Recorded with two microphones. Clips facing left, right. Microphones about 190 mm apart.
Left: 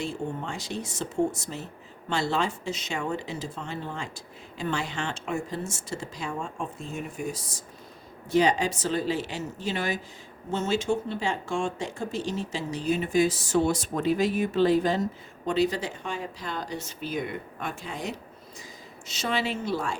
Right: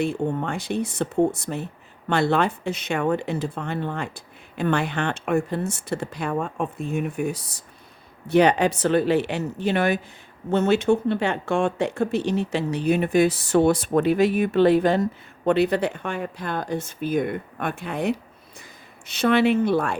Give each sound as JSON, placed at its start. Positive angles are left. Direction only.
{"t": 0.0, "sound": "speech", "side_deg": -60}